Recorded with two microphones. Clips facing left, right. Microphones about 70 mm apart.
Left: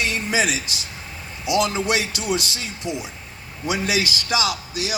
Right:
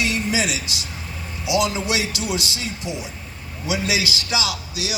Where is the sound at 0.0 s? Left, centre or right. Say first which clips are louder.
Even; left.